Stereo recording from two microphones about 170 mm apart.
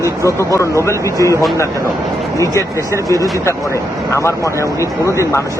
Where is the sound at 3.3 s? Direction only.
15° left (ahead or behind).